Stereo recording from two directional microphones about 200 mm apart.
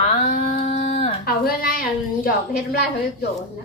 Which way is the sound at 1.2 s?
45° left (ahead or behind).